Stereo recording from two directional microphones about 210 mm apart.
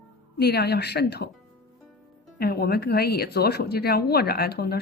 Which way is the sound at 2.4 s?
45° left (ahead or behind).